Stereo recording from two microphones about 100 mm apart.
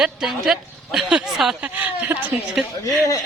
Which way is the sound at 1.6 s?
15° right (ahead or behind).